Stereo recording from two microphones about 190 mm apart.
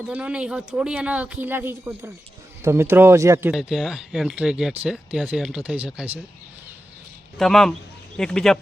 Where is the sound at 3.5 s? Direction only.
Centre (ahead or behind).